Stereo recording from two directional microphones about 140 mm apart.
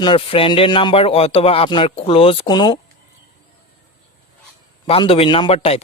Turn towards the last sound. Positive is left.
turn(degrees=45)  # may be behind; listen again after turning